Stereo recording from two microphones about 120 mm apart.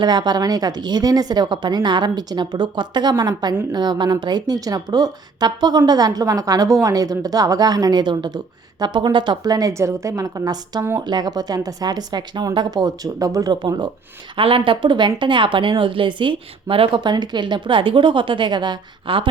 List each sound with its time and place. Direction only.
0.0 s a woman's voice: 35° right (ahead or behind)